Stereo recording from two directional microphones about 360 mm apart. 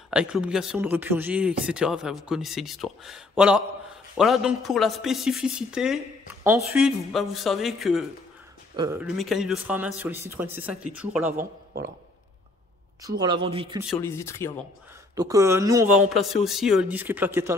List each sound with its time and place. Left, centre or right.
0.1 s speech: centre
11.3 s speech: right
13.2 s speech: centre
13.8 s speech: centre
15.1 s speech: centre